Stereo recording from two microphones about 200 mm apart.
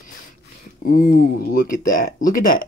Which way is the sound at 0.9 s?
45° left (ahead or behind).